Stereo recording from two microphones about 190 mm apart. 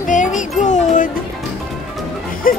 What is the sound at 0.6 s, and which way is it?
Speech, 40° left (ahead or behind).